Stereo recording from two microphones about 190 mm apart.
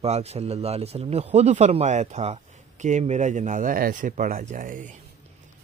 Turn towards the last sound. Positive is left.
turn(degrees=-40)  # may be behind; listen again after turning